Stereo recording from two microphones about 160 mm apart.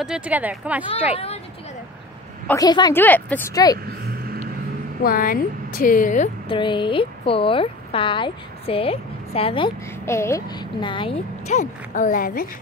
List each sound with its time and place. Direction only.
0.0 s speech: 5° right (ahead or behind)
1.1 s speech: 40° left (ahead or behind)
2.5 s a woman's voice: 25° left (ahead or behind)
2.9 s a woman's voice: 10° left (ahead or behind)
3.5 s a woman's voice: 25° left (ahead or behind)
5.0 s a woman's voice: 65° left (ahead or behind)
6.5 s speech: 30° left (ahead or behind)
10.0 s a woman's voice: 15° left (ahead or behind)
11.4 s a woman's voice: 50° left (ahead or behind)